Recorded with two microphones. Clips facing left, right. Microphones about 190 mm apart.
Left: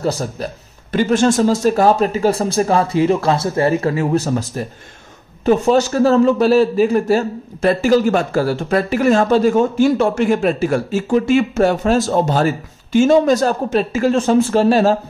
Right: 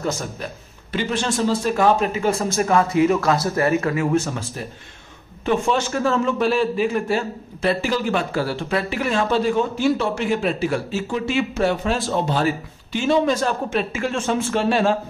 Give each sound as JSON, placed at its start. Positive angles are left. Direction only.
{"t": 0.0, "sound": "speech", "side_deg": 35}
{"t": 0.9, "sound": "a man's voice", "side_deg": 45}